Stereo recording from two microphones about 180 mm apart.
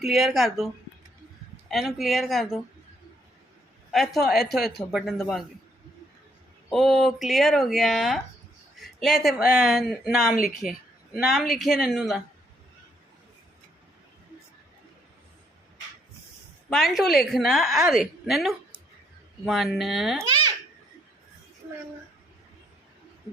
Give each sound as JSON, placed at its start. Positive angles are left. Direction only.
{"t": 0.0, "sound": "a woman's voice", "side_deg": 0}
{"t": 3.9, "sound": "a woman's voice", "side_deg": 0}
{"t": 6.7, "sound": "a woman's voice", "side_deg": 0}
{"t": 16.6, "sound": "a woman's voice", "side_deg": 0}
{"t": 20.2, "sound": "babbling", "side_deg": -25}